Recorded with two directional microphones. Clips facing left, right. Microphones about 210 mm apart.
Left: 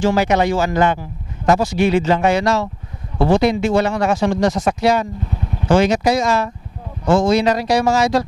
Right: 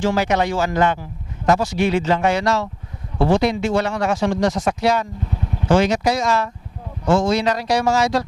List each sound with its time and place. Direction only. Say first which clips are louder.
0.0 s speech: left 3 dB; 10° left (ahead or behind)
5.8 s speech: left 4 dB; 5° left (ahead or behind)